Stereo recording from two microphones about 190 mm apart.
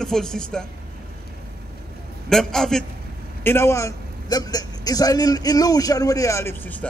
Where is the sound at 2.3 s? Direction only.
5° left (ahead or behind).